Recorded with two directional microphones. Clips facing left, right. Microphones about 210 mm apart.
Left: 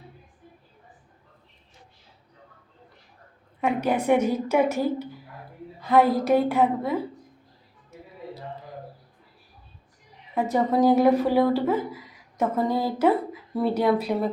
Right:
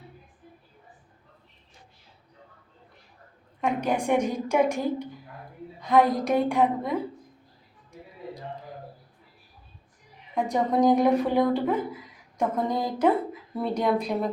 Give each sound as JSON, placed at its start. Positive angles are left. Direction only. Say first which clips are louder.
{"t": 3.6, "sound": "a woman's voice", "louder": "left 2 dB", "side_deg": 5}
{"t": 10.3, "sound": "a woman's voice", "louder": "left 2 dB", "side_deg": 5}